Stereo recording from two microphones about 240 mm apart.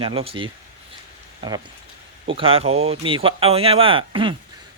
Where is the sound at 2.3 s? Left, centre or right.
Right.